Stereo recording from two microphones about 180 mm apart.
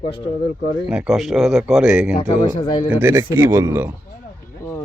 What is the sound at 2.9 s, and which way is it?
Speech, 10° right (ahead or behind).